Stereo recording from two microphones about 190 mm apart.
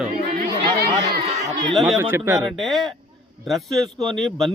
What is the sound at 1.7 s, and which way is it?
Speech, centre (ahead or behind).